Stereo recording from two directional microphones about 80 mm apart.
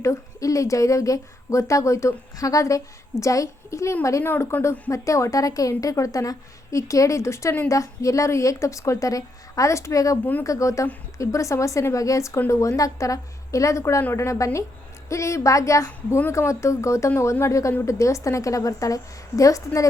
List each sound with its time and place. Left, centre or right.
0.0 s a woman's voice: left
4.2 s a woman's voice: left